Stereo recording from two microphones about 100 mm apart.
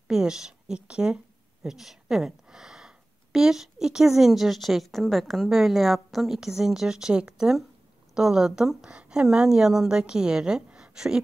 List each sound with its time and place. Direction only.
0.1 s a woman's voice: 5° right (ahead or behind)